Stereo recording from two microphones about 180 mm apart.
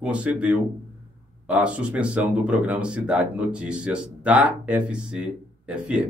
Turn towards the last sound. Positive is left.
turn(degrees=-5)  # may be behind; listen again after turning